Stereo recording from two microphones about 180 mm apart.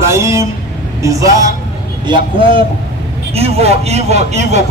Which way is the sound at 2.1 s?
30° right (ahead or behind).